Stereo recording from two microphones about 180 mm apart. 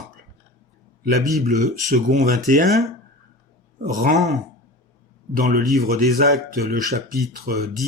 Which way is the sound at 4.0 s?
45° right (ahead or behind).